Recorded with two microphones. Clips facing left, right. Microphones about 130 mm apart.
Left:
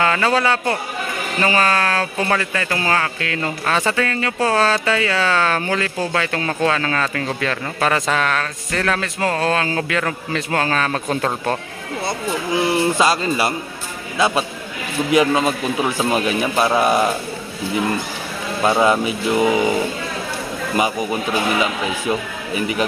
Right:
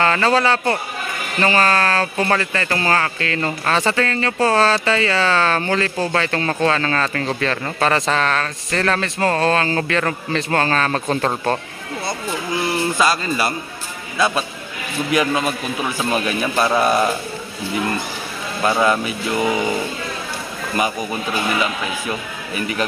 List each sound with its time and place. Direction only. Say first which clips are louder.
0.0 s speech: right 1 dB; 10° left (ahead or behind)
12.7 s a man's voice: even; 25° left (ahead or behind)
18.6 s speech: left 2 dB; 15° left (ahead or behind)
22.5 s speech: left 2 dB; 20° left (ahead or behind)